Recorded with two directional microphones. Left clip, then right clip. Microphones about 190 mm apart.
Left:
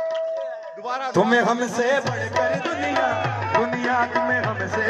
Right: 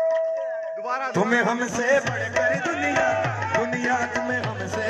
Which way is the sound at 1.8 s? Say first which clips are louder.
Right 3 dB; 35° left (ahead or behind).